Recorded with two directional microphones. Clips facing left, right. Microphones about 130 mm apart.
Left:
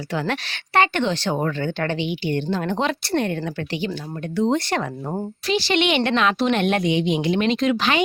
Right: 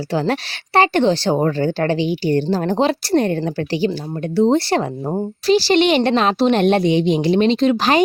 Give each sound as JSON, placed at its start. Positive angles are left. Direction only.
{"t": 0.1, "sound": "a woman's voice", "side_deg": -35}